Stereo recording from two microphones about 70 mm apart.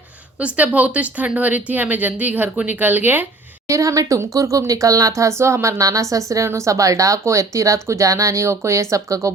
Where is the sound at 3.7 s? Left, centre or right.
Right.